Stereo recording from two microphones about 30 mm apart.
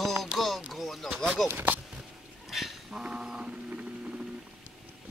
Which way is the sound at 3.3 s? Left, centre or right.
Right.